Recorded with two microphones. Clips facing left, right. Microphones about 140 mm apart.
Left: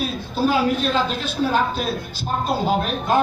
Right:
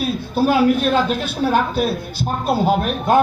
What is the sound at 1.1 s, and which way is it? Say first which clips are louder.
Speech: right 3 dB; 10° right (ahead or behind).